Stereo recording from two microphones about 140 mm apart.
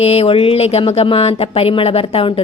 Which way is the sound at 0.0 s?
45° left (ahead or behind).